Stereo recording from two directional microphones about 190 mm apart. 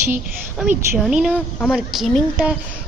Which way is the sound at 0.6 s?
5° right (ahead or behind).